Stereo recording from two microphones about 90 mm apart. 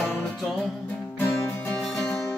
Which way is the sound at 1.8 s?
Centre (ahead or behind).